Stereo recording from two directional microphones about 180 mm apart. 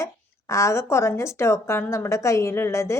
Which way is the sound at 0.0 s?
15° left (ahead or behind).